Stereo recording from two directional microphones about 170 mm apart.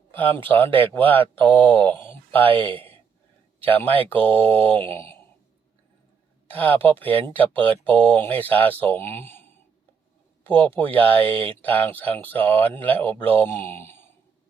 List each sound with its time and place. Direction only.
0.2 s speech: 10° left (ahead or behind)
2.4 s speech: 30° right (ahead or behind)
3.6 s speech: 10° left (ahead or behind)
6.5 s speech: 10° left (ahead or behind)